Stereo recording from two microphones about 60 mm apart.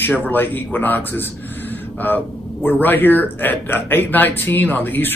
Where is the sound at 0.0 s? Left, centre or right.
Left.